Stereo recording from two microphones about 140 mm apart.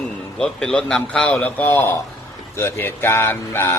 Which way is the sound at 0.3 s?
5° left (ahead or behind).